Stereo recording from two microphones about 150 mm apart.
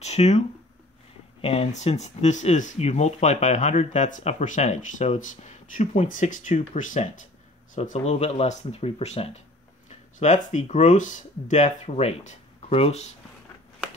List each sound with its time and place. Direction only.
0.0 s speech: 45° left (ahead or behind)
1.4 s speech: 40° left (ahead or behind)